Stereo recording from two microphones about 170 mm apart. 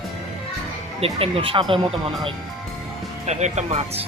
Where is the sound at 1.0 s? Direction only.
35° right (ahead or behind).